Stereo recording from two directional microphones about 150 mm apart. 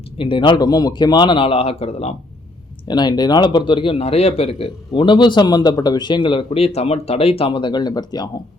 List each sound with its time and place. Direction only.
0.2 s a man's voice: 35° left (ahead or behind)
2.8 s a man's voice: 30° left (ahead or behind)